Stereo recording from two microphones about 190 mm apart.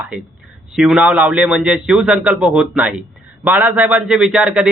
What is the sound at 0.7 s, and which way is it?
A man's voice, centre (ahead or behind).